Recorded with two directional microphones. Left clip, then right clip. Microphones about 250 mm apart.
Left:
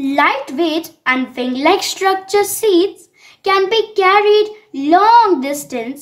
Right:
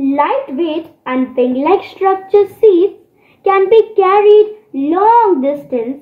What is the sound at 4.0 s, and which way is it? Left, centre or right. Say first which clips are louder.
A child's voice: even; left.